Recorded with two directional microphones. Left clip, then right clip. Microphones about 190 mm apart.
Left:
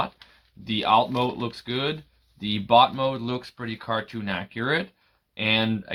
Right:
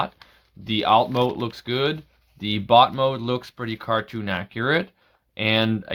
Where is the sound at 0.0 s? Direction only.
50° right (ahead or behind).